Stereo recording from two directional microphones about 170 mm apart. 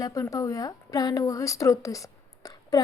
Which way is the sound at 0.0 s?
20° left (ahead or behind).